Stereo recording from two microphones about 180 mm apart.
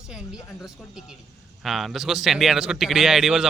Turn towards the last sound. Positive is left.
turn(degrees=0)  # may be behind; listen again after turning